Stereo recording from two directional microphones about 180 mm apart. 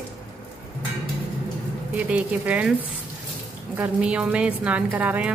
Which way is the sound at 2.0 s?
10° right (ahead or behind).